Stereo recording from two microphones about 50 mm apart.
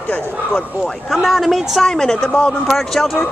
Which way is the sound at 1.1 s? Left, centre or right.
Centre.